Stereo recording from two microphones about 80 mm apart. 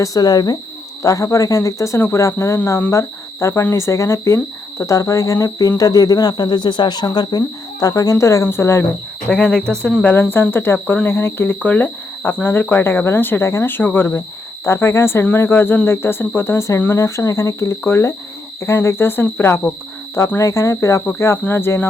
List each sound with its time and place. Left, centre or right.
0.0 s speech: left
1.0 s speech: left
9.3 s speech: centre
14.6 s speech: left
21.5 s speech: left